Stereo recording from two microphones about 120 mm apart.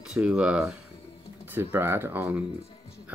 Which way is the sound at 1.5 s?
20° right (ahead or behind).